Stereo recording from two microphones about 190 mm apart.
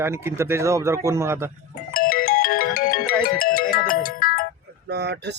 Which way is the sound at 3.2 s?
50° left (ahead or behind).